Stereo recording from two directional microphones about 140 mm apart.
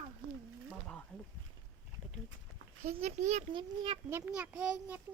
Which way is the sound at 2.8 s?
55° right (ahead or behind).